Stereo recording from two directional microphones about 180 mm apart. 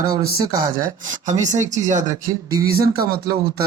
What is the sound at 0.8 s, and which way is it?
Speech, 45° right (ahead or behind).